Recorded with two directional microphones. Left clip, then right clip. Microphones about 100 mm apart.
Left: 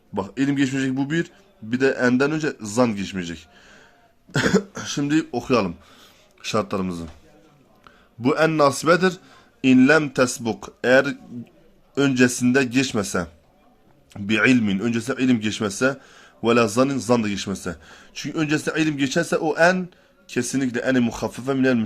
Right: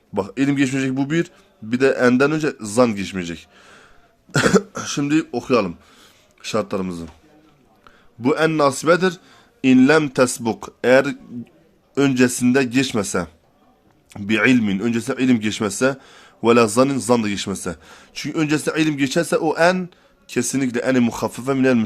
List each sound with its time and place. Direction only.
0.1 s a man's voice: 40° right (ahead or behind)
4.3 s cough: 50° right (ahead or behind)
4.8 s a man's voice: 30° right (ahead or behind); by 9.4 s 10° right (ahead or behind)
9.6 s a man's voice: 20° right (ahead or behind)